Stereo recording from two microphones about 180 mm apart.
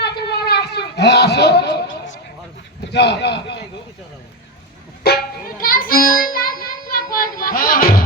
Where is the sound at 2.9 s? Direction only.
70° left (ahead or behind).